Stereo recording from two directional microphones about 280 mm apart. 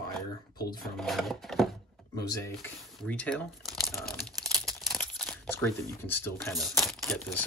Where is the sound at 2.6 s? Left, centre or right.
Centre.